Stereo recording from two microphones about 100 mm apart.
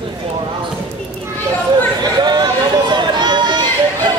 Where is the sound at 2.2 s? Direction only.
45° right (ahead or behind).